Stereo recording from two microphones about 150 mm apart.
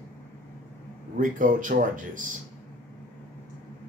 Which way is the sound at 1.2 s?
60° right (ahead or behind).